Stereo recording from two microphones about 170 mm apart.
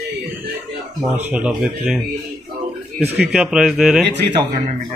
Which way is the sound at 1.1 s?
10° right (ahead or behind).